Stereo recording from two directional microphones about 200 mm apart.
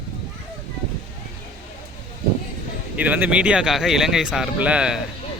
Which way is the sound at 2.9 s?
10° right (ahead or behind).